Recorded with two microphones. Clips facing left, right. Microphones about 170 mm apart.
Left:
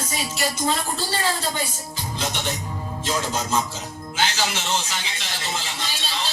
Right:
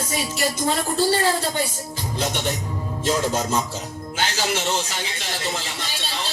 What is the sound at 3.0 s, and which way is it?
A woman's voice, 55° right (ahead or behind).